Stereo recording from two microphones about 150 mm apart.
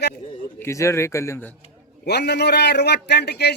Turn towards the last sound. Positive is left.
turn(degrees=90)